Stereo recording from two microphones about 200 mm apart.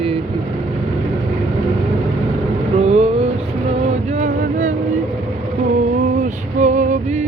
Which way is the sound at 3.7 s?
30° right (ahead or behind).